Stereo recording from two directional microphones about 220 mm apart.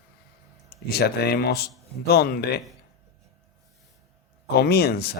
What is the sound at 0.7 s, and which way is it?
Speech, 45° left (ahead or behind).